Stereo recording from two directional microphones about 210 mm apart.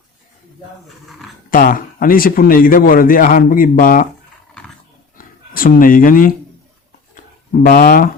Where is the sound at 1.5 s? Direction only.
40° left (ahead or behind).